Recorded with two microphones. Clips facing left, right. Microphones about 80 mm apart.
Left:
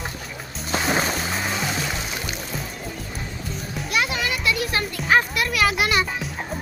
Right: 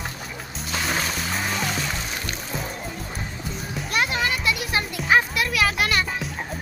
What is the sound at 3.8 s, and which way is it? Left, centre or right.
Children playing, right.